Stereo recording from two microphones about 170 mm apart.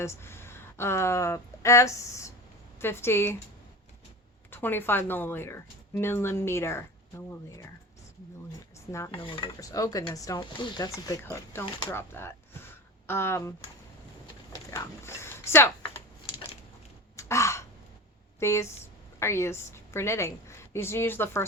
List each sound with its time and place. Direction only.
0.0 s a woman's voice: 15° left (ahead or behind)
4.5 s a woman's voice: 10° left (ahead or behind)
9.1 s a woman's voice: 30° left (ahead or behind)
14.7 s speech: 15° left (ahead or behind)
17.2 s crow: 15° left (ahead or behind)
18.3 s a woman's voice: 15° left (ahead or behind)